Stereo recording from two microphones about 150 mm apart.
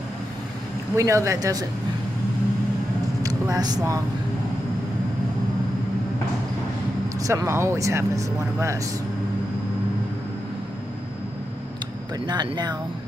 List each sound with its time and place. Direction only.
0.9 s speech: 20° right (ahead or behind)
3.2 s speech: 25° right (ahead or behind)
7.2 s speech: 20° right (ahead or behind)
12.3 s speech: 30° right (ahead or behind)